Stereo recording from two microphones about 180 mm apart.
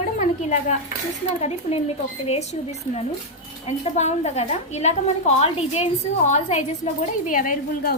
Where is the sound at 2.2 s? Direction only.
35° left (ahead or behind).